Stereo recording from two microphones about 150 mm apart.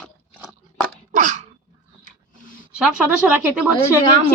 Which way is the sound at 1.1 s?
55° right (ahead or behind).